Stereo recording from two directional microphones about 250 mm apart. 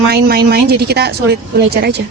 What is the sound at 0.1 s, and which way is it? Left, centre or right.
A woman's voice, right.